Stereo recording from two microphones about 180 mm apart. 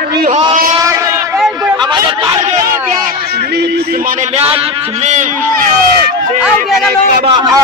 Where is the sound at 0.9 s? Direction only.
15° right (ahead or behind).